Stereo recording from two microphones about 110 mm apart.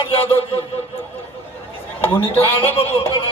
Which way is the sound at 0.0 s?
55° left (ahead or behind).